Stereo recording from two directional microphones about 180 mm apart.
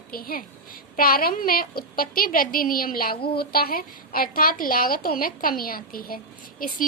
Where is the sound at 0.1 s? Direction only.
55° left (ahead or behind).